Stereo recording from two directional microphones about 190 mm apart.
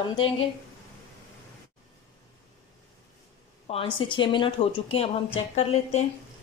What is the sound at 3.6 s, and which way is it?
A woman's voice, 30° left (ahead or behind).